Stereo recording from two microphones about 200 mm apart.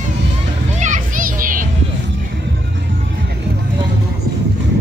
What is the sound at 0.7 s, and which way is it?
Children playing, 40° right (ahead or behind).